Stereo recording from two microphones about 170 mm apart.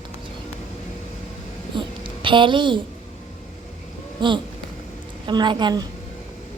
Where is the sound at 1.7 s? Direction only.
30° right (ahead or behind).